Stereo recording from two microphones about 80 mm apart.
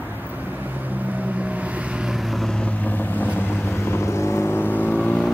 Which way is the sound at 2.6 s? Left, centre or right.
Centre.